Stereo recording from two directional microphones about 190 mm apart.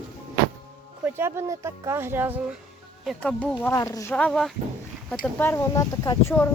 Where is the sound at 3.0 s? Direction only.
5° left (ahead or behind).